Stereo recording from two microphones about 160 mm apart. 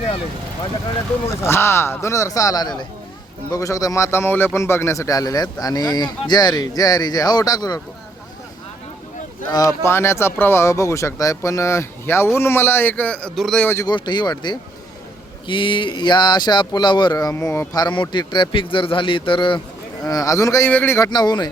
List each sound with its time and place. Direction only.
1.3 s a man's voice: 15° left (ahead or behind)
9.5 s speech: 20° left (ahead or behind); by 13.7 s centre (ahead or behind)
13.7 s a man's voice: 20° left (ahead or behind)
21.1 s a man's voice: 25° left (ahead or behind)